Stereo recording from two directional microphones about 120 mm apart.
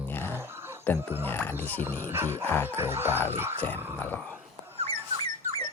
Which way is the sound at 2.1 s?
20° right (ahead or behind).